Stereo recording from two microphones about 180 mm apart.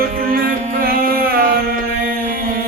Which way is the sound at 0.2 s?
55° right (ahead or behind).